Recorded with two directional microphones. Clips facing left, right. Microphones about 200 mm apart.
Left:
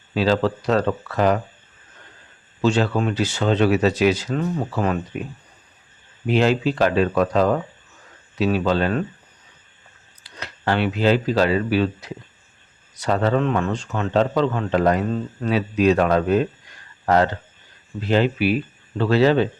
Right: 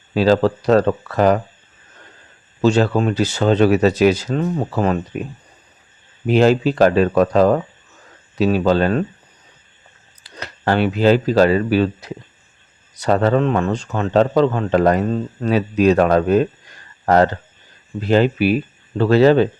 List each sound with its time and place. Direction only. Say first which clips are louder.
0.1 s speech: right 5 dB; 45° right (ahead or behind)
2.6 s a man's voice: right 4 dB; 40° right (ahead or behind)
6.2 s a man's voice: right 5 dB; 45° right (ahead or behind)
10.3 s a man's voice: right 4 dB; 40° right (ahead or behind)
18.1 s speech: right 4 dB; 45° right (ahead or behind)